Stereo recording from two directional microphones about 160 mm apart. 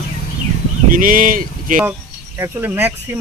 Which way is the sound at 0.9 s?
55° right (ahead or behind).